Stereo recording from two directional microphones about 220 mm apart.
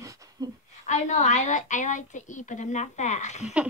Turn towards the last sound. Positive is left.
turn(degrees=30)  # may be behind; listen again after turning